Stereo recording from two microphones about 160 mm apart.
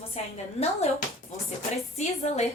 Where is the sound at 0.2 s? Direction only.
45° left (ahead or behind).